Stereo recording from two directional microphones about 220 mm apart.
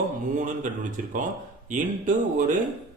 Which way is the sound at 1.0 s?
35° right (ahead or behind).